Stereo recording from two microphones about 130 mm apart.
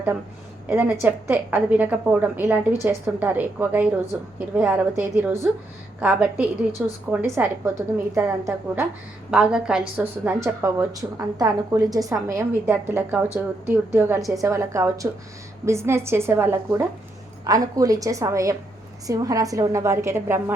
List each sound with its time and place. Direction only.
1.0 s a woman's voice: 15° right (ahead or behind)
9.3 s a woman's voice: 5° right (ahead or behind)
17.4 s a woman's voice: 25° right (ahead or behind)